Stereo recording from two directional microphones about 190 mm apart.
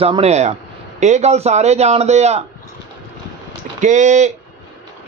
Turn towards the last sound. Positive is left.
turn(degrees=-40)  # may be behind; listen again after turning